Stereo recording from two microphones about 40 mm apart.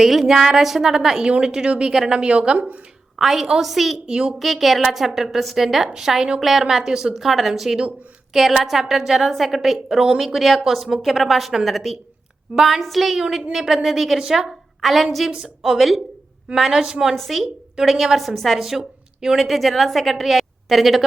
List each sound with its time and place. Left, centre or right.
0.0 s a woman's voice: centre
1.2 s a woman's voice: right
3.2 s a woman's voice: centre
3.6 s a woman's voice: centre
4.0 s a woman's voice: centre
4.4 s a woman's voice: centre
9.9 s a woman's voice: centre
10.2 s a woman's voice: centre
12.5 s a woman's voice: centre
12.8 s a woman's voice: centre
16.7 s a woman's voice: centre
17.2 s a woman's voice: centre
18.8 s a sound: centre
19.4 s a woman's voice: centre